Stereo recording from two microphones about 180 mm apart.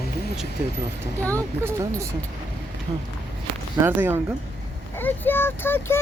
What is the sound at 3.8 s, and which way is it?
Speech, 10° right (ahead or behind).